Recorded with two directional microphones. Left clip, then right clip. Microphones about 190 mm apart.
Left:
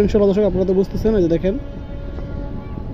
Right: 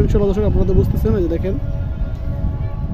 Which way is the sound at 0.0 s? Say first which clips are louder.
Left 3 dB; 15° left (ahead or behind).